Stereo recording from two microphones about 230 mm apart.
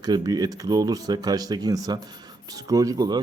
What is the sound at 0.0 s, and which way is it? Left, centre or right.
Speech, centre.